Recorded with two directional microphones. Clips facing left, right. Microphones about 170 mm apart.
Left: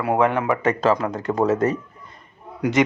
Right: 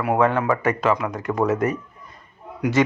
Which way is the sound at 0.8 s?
35° left (ahead or behind).